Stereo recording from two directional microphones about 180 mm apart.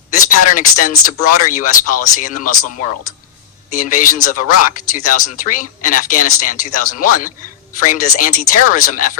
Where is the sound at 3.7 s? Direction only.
50° left (ahead or behind).